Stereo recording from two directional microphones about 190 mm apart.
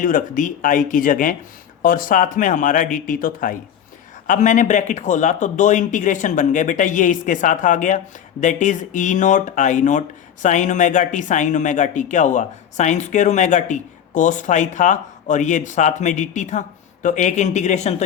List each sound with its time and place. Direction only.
0.0 s speech: 45° left (ahead or behind)